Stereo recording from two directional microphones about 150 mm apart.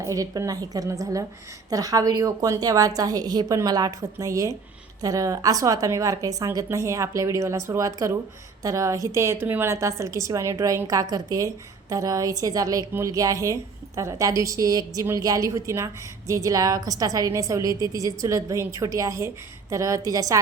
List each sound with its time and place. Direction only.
0.0 s a woman's voice: 20° right (ahead or behind)